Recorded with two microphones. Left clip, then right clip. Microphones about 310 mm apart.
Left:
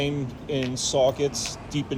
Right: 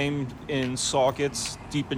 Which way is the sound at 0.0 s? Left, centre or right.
Centre.